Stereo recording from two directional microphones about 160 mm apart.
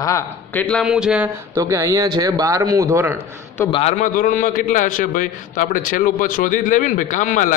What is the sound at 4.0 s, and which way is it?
A man's voice, 55° left (ahead or behind).